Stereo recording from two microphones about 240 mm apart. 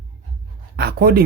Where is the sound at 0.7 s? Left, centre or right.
Right.